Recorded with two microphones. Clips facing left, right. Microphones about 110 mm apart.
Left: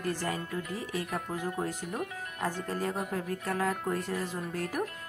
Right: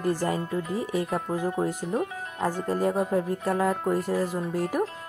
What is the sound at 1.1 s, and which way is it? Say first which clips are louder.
Speech: right 7 dB; 30° right (ahead or behind).